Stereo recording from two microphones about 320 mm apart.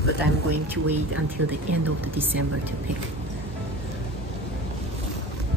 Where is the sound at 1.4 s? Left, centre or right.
Right.